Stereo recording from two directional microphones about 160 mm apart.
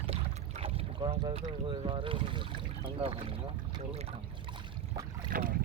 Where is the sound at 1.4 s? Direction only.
30° right (ahead or behind).